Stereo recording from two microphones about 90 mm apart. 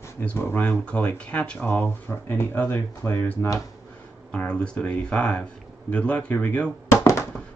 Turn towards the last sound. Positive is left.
turn(degrees=30)  # may be behind; listen again after turning